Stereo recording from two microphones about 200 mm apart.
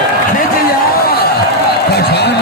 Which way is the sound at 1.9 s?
55° left (ahead or behind).